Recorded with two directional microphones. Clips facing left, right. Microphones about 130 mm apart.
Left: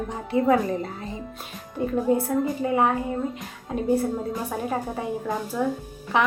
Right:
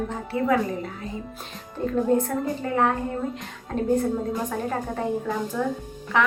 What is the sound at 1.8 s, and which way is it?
A woman's voice, 10° left (ahead or behind).